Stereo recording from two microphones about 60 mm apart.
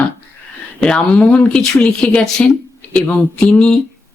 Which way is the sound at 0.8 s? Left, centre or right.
Centre.